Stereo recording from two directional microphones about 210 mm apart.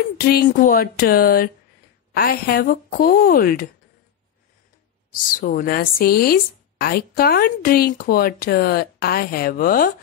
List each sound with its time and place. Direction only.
0.2 s speech: 45° left (ahead or behind)
5.3 s speech: 40° left (ahead or behind)